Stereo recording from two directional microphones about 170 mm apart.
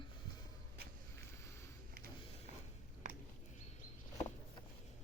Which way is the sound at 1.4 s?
15° left (ahead or behind).